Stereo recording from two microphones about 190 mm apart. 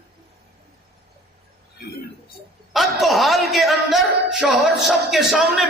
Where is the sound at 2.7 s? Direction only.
Centre (ahead or behind).